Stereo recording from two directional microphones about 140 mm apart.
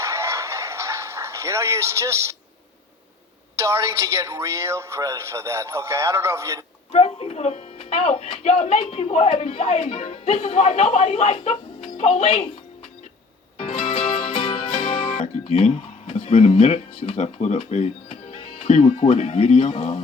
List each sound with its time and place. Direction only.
0.0 s a sound: 20° right (ahead or behind)
3.6 s a woman's voice: 20° right (ahead or behind)
6.9 s speech: 45° left (ahead or behind)
10.5 s speech: 55° left (ahead or behind)
13.6 s music: 40° left (ahead or behind)
15.6 s speech: 50° left (ahead or behind)